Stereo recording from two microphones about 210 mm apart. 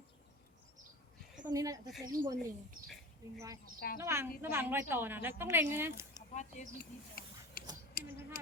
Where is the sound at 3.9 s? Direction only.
10° right (ahead or behind).